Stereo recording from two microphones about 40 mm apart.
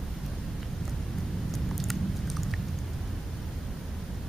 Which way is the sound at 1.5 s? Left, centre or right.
Centre.